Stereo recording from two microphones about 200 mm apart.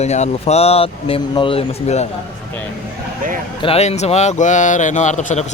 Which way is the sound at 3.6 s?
30° left (ahead or behind).